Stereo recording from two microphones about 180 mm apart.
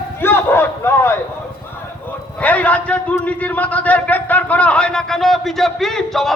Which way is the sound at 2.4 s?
10° left (ahead or behind).